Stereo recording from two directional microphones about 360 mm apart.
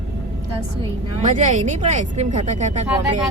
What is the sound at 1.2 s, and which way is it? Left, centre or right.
Speech, right.